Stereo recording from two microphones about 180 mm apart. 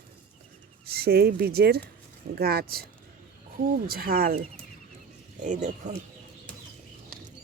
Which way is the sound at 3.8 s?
55° right (ahead or behind).